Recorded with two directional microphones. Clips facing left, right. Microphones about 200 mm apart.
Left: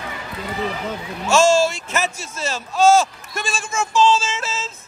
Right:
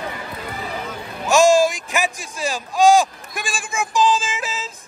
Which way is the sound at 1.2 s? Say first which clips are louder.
Right 1 dB; 15° right (ahead or behind).